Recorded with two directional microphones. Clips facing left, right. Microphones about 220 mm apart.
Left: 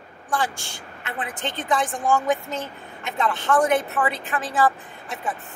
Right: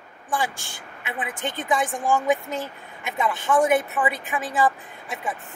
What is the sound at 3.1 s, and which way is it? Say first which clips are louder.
Speech: even; centre (ahead or behind).